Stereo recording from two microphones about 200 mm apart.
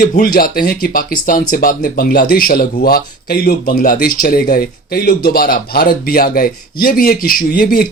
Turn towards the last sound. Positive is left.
turn(degrees=50)  # may be behind; listen again after turning